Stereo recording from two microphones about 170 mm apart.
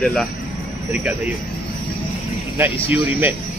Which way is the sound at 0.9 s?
10° right (ahead or behind).